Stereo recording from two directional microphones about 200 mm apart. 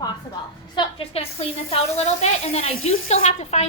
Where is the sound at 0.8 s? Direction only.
30° left (ahead or behind).